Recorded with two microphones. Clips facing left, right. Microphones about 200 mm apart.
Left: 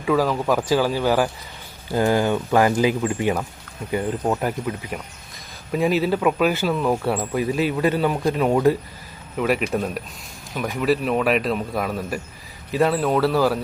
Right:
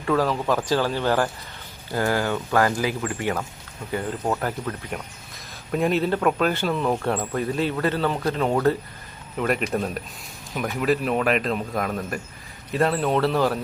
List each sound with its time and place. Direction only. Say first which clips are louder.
0.0 s speech: left 2 dB; 5° left (ahead or behind)